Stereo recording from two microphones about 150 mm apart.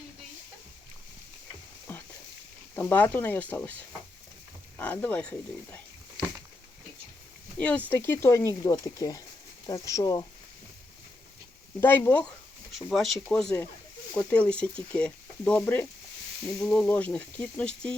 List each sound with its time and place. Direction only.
2.7 s speech: 10° left (ahead or behind)
4.8 s speech: 10° left (ahead or behind)
7.6 s speech: 10° left (ahead or behind)
11.8 s speech: 15° left (ahead or behind)
12.7 s speech: centre (ahead or behind)